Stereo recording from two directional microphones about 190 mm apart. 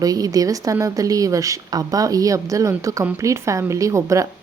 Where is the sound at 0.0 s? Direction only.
20° right (ahead or behind).